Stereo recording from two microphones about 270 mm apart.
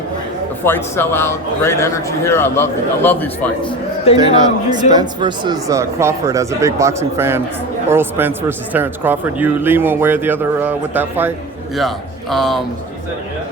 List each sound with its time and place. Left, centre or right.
0.6 s a man's voice: centre
3.6 s speech: left
4.2 s speech: centre